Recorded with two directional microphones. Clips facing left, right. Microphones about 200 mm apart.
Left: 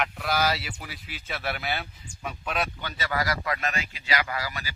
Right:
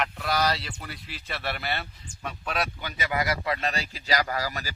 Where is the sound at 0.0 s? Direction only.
Centre (ahead or behind).